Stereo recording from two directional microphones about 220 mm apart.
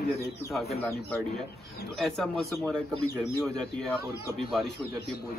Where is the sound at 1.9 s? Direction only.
Centre (ahead or behind).